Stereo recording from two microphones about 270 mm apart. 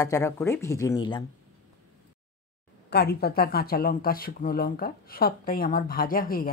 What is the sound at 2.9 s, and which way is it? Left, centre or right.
Speech, left.